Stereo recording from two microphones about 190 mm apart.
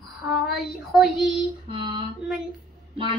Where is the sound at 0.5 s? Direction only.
Centre (ahead or behind).